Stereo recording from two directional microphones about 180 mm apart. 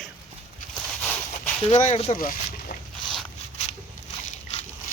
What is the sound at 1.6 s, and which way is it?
Speech, 40° left (ahead or behind).